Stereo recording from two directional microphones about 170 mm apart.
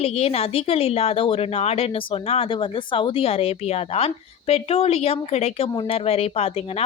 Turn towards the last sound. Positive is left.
turn(degrees=35)  # may be behind; listen again after turning